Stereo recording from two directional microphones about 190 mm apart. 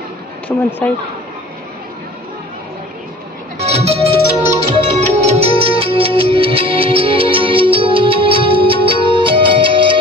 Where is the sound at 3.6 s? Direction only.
35° right (ahead or behind).